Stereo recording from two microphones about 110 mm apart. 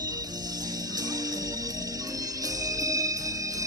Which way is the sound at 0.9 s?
35° right (ahead or behind).